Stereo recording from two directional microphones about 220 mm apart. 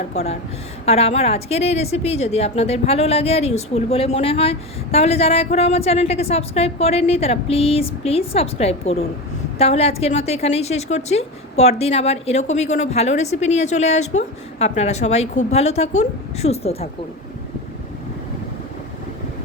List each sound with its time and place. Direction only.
0.1 s a woman's voice: 30° left (ahead or behind)